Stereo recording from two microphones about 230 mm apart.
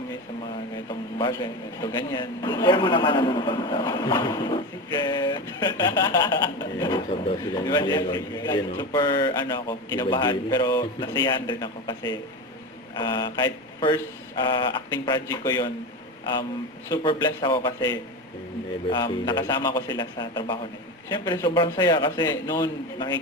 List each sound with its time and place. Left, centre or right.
1.2 s a man's voice: centre
15.0 s a man's voice: centre
16.9 s a man's voice: left